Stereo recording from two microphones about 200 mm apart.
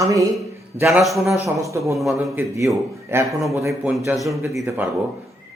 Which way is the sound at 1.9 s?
Centre (ahead or behind).